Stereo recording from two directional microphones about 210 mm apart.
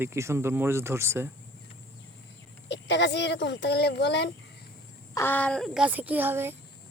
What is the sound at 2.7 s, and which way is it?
Speech, 55° left (ahead or behind).